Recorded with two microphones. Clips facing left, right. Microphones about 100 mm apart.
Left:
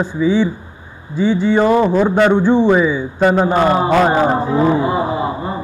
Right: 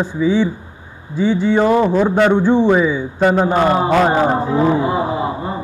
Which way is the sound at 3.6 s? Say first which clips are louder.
Left 1 dB; 20° left (ahead or behind).